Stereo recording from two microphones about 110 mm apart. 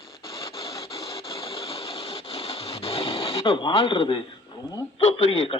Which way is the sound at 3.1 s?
65° left (ahead or behind).